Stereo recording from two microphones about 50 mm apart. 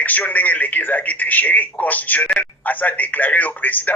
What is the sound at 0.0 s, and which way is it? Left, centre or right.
A man's voice, left.